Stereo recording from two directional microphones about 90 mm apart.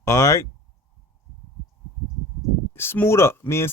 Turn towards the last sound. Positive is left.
turn(degrees=25)  # may be behind; listen again after turning